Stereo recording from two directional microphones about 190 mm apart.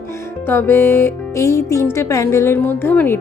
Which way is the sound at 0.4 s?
10° left (ahead or behind).